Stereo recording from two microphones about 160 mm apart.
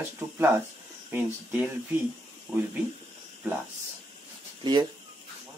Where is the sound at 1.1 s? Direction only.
10° right (ahead or behind).